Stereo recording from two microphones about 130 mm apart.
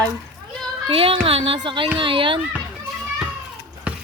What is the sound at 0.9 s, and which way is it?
A child's voice, 45° right (ahead or behind).